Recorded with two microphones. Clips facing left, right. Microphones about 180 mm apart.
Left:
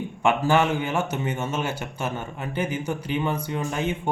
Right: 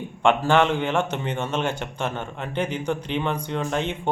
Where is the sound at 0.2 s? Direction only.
5° left (ahead or behind).